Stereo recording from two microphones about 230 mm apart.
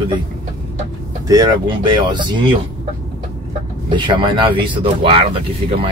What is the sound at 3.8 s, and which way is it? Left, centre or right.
Speech, right.